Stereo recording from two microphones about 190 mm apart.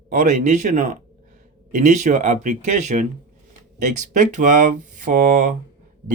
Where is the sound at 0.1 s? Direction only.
40° right (ahead or behind).